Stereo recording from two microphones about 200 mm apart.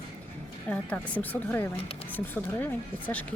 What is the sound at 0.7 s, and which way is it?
Speech, 5° left (ahead or behind).